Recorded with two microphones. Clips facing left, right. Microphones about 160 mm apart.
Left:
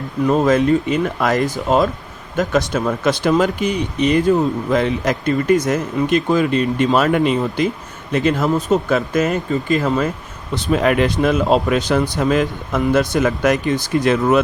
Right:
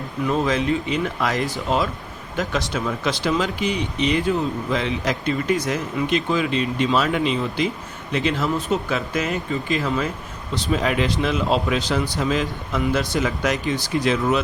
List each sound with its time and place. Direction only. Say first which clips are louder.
0.3 s speech: left 7 dB; 45° left (ahead or behind)
10.5 s speech: left 6 dB; 55° left (ahead or behind)